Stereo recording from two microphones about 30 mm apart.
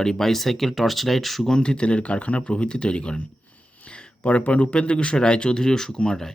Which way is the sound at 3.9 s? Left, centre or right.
Left.